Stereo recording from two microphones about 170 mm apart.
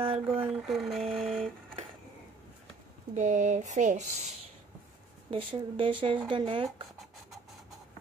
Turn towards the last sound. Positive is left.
turn(degrees=-30)  # may be behind; listen again after turning